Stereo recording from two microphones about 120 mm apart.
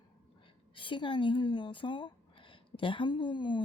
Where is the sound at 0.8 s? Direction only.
45° left (ahead or behind).